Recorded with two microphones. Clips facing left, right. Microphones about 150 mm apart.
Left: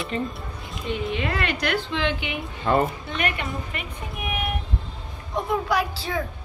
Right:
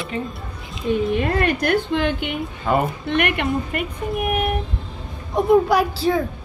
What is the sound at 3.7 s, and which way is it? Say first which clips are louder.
Speech: right 10 dB; 50° right (ahead or behind).